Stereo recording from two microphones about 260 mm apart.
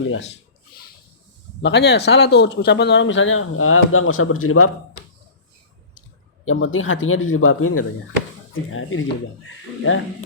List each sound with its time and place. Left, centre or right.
1.6 s speech: left
6.4 s speech: left